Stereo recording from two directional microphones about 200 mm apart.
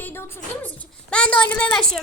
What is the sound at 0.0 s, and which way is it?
A woman's voice, 10° left (ahead or behind).